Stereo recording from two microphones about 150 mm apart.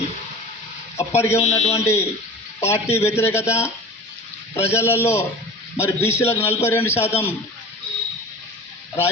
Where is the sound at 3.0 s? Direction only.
15° left (ahead or behind).